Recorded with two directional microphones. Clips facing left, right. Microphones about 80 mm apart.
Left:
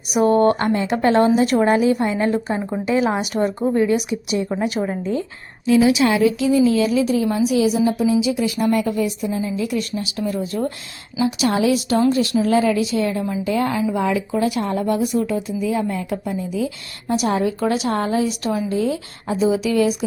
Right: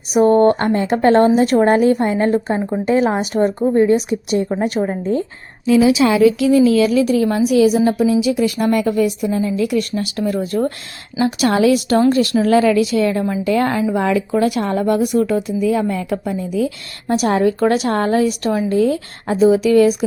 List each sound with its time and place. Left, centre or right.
0.1 s speech: right
2.6 s a woman's voice: centre
2.8 s speech: right
4.8 s speech: right
6.2 s a woman's voice: right